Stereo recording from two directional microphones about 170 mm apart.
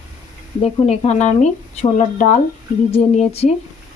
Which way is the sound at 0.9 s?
40° left (ahead or behind).